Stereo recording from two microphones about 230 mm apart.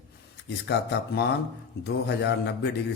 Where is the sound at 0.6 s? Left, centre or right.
Left.